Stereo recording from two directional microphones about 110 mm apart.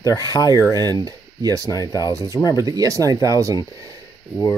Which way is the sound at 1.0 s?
35° right (ahead or behind).